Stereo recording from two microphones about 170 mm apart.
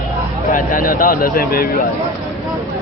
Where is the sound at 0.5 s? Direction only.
55° left (ahead or behind).